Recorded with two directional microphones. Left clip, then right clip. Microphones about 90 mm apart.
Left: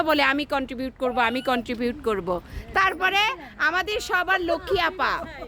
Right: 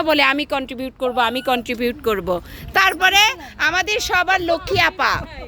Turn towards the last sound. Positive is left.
turn(degrees=-25)  # may be behind; listen again after turning